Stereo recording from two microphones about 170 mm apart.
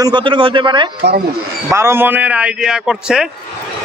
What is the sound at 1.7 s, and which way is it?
Speech, 15° right (ahead or behind).